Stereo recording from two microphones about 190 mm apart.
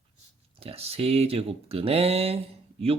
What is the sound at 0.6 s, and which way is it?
Speech, 30° right (ahead or behind).